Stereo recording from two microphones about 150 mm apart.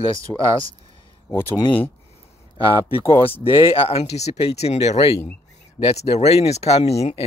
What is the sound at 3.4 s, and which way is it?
Speech, 40° left (ahead or behind).